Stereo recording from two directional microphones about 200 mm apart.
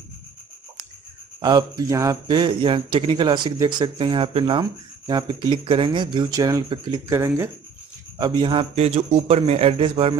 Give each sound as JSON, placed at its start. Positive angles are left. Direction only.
{"t": 1.4, "sound": "speech", "side_deg": -20}